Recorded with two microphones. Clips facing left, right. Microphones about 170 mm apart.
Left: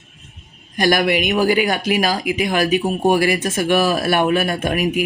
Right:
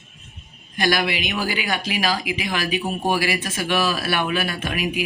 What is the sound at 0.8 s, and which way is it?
Speech, 45° left (ahead or behind).